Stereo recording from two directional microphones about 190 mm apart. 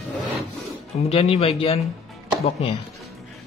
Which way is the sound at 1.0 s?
30° left (ahead or behind).